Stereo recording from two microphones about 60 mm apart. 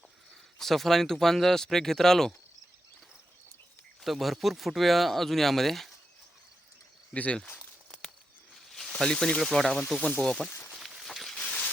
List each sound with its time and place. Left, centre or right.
0.6 s speech: centre
4.0 s speech: centre
7.1 s speech: left
8.9 s speech: centre
10.7 s walk: centre
11.4 s a sound: left